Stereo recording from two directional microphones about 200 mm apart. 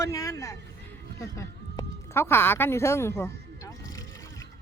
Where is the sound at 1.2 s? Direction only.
15° left (ahead or behind).